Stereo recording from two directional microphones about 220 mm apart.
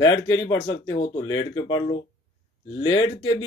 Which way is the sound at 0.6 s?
15° left (ahead or behind).